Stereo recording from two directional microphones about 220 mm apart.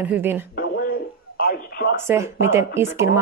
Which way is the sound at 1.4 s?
45° left (ahead or behind).